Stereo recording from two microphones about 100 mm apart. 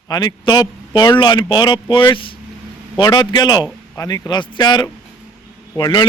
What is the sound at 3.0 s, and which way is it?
A man's voice, 45° left (ahead or behind).